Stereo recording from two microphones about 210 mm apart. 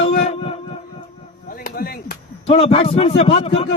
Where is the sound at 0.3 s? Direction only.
25° left (ahead or behind).